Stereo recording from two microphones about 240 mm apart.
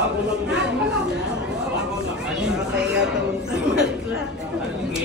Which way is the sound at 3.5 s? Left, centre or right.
Centre.